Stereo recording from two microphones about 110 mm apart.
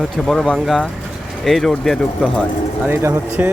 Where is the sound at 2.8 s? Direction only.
20° right (ahead or behind).